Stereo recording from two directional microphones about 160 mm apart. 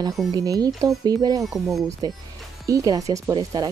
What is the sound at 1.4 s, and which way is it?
Speech, centre (ahead or behind).